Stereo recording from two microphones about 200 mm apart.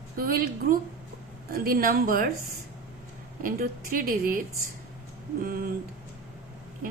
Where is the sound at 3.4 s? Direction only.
45° right (ahead or behind).